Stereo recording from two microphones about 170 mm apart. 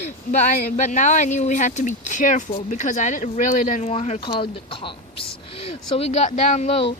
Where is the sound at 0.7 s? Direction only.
45° left (ahead or behind).